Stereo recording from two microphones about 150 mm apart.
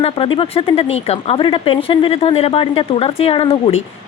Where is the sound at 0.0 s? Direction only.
35° left (ahead or behind).